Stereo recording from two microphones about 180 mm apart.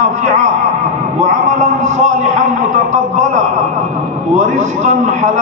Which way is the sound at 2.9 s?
40° right (ahead or behind).